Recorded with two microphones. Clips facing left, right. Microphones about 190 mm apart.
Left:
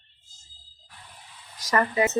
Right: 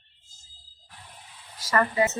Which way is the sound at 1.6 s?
15° left (ahead or behind).